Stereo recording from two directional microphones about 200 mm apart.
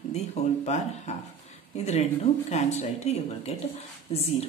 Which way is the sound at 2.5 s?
35° left (ahead or behind).